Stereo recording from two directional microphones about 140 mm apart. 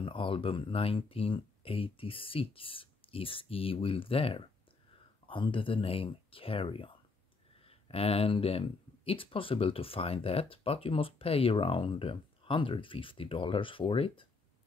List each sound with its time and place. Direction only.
0.0 s speech: 40° left (ahead or behind)
7.9 s speech: 45° left (ahead or behind)